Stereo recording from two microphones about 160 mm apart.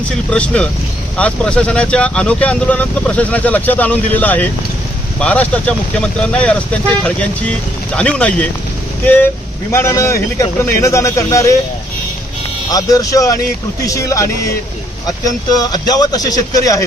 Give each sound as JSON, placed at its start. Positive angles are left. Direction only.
{"t": 0.3, "sound": "a man's voice", "side_deg": 5}
{"t": 12.7, "sound": "a man's voice", "side_deg": 20}
{"t": 15.7, "sound": "a man's voice", "side_deg": 25}